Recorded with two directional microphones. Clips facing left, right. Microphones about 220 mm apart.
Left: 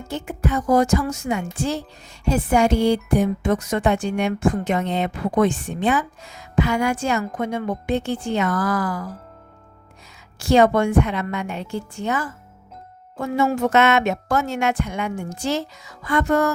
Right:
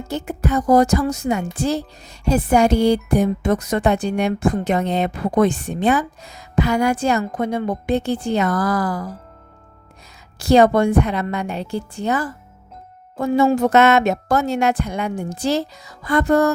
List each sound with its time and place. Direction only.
0.1 s a woman's voice: 40° right (ahead or behind)
10.3 s a woman's voice: 35° right (ahead or behind)